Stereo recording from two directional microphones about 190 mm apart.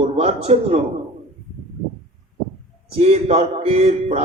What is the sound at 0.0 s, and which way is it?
Speech, 35° right (ahead or behind).